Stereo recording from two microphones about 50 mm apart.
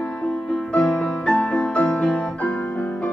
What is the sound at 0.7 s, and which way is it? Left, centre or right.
Music, left.